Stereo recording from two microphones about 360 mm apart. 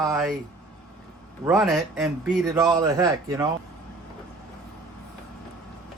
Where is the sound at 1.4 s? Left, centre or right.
Centre.